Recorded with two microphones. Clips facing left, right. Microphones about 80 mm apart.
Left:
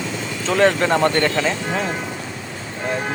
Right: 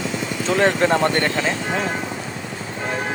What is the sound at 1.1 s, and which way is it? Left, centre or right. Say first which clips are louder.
Speech: left 2 dB; centre.